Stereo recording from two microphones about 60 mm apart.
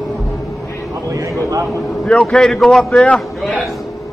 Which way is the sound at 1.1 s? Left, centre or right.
Right.